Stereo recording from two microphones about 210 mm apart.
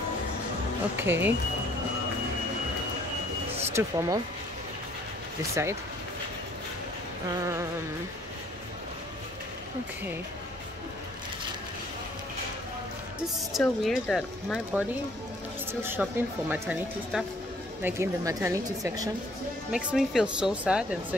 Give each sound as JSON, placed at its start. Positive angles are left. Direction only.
{"t": 0.9, "sound": "speech", "side_deg": -10}
{"t": 3.7, "sound": "speech", "side_deg": -15}
{"t": 5.5, "sound": "speech", "side_deg": -15}
{"t": 7.2, "sound": "speech", "side_deg": -15}
{"t": 13.5, "sound": "speech", "side_deg": 0}
{"t": 19.7, "sound": "speech", "side_deg": -5}